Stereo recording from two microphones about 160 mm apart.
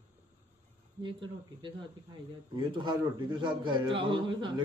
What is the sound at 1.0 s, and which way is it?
A man's voice, 30° right (ahead or behind).